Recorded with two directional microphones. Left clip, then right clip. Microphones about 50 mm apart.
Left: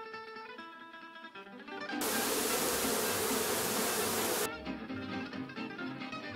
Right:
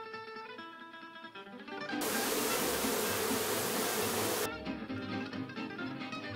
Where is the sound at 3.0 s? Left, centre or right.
Centre.